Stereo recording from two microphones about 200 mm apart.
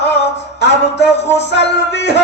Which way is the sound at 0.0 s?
60° left (ahead or behind).